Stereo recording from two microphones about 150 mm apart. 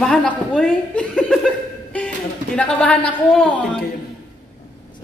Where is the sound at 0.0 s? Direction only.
5° left (ahead or behind).